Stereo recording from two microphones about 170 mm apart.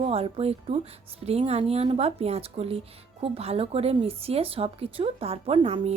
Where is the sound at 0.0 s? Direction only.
35° right (ahead or behind).